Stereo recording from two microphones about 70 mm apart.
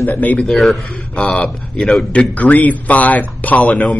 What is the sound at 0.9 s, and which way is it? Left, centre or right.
Speech, centre.